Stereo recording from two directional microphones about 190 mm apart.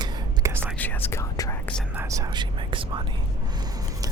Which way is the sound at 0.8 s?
10° left (ahead or behind).